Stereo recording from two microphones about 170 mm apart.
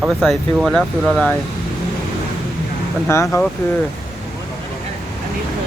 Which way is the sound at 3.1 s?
15° left (ahead or behind).